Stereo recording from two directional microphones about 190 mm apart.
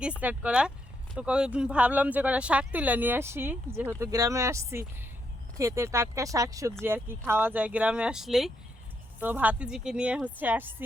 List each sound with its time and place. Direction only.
0.2 s speech: 10° right (ahead or behind)